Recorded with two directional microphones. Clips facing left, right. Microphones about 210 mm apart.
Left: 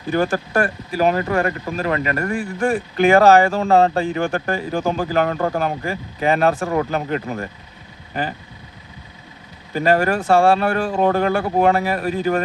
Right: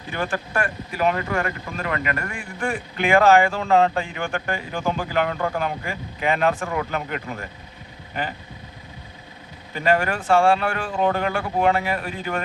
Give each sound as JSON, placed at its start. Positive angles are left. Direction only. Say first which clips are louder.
{"t": 0.1, "sound": "speech", "louder": "left 7 dB", "side_deg": 40}
{"t": 9.7, "sound": "speech", "louder": "left 4 dB", "side_deg": 40}